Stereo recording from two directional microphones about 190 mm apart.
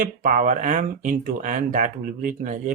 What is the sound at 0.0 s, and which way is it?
Speech, 45° right (ahead or behind).